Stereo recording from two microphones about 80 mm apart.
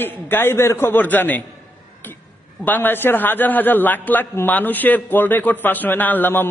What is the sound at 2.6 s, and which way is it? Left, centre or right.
A man's voice, left.